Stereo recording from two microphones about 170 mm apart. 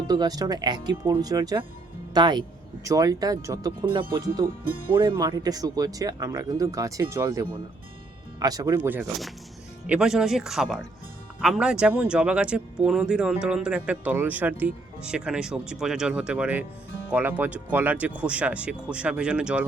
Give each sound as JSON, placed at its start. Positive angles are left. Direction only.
{"t": 0.1, "sound": "speech", "side_deg": -20}
{"t": 4.6, "sound": "speech", "side_deg": -60}
{"t": 4.9, "sound": "speech", "side_deg": -30}
{"t": 8.8, "sound": "speech", "side_deg": -10}